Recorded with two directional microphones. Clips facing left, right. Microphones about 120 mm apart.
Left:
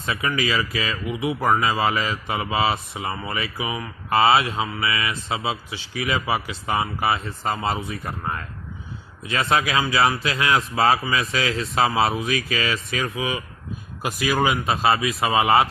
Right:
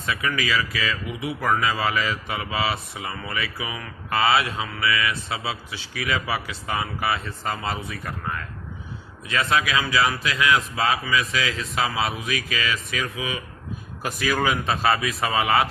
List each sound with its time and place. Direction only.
0.0 s speech: 30° left (ahead or behind)
14.0 s a man's voice: 15° left (ahead or behind)